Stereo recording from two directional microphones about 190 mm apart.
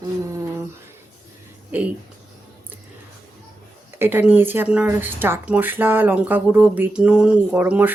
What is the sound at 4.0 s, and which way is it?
Speech, 10° right (ahead or behind).